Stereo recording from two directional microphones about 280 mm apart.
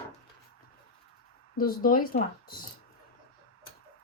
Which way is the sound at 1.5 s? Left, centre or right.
Left.